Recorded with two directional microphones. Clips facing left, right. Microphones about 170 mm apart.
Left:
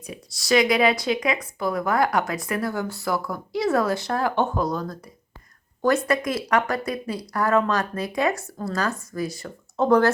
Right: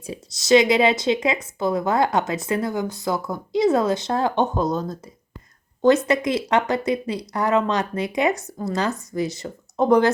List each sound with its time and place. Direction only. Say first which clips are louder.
0.0 s speech: right 4 dB; 25° right (ahead or behind)